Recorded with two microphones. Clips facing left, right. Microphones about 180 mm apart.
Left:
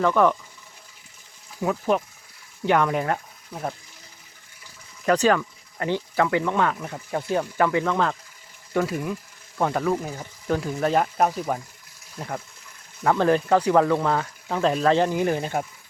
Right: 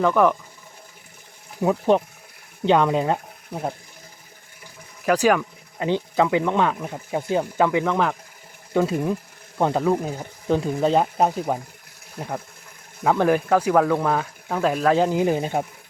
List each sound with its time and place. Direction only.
0.0 s speech: 10° right (ahead or behind)
1.6 s speech: 20° right (ahead or behind)
5.0 s speech: 10° right (ahead or behind)
13.1 s speech: 10° right (ahead or behind)